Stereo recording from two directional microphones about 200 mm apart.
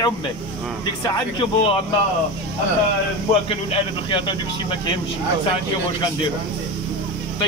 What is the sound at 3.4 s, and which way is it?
Speech, 25° left (ahead or behind).